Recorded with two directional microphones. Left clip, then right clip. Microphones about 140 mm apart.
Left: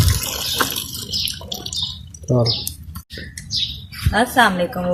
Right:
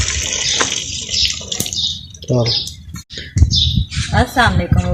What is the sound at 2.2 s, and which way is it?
Speech, 15° right (ahead or behind).